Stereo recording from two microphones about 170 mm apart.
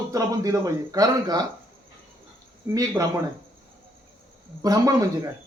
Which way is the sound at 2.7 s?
20° right (ahead or behind).